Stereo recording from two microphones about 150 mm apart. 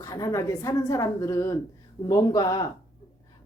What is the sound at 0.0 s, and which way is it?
Speech, 20° left (ahead or behind).